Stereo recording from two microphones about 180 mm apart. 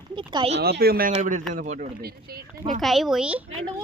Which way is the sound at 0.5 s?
60° right (ahead or behind).